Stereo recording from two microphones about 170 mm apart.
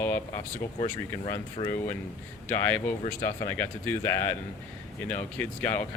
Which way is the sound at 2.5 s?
10° left (ahead or behind).